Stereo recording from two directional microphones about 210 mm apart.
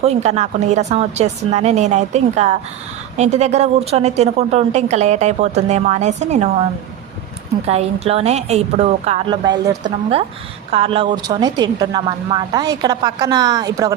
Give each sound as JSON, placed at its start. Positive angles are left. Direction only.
{"t": 0.0, "sound": "a woman's voice", "side_deg": -30}
{"t": 7.7, "sound": "speech", "side_deg": -30}